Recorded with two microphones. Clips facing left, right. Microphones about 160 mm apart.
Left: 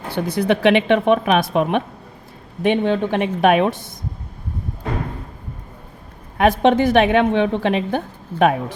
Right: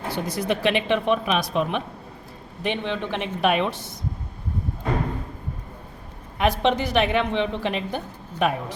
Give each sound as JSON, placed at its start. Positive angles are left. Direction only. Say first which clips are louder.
{"t": 0.1, "sound": "speech", "louder": "left 7 dB", "side_deg": 60}
{"t": 2.6, "sound": "a woman's voice", "louder": "left 9 dB", "side_deg": 45}
{"t": 6.4, "sound": "a woman's voice", "louder": "left 7 dB", "side_deg": 50}